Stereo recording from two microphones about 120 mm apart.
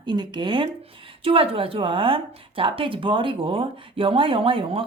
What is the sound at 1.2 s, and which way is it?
A woman's voice, 50° right (ahead or behind).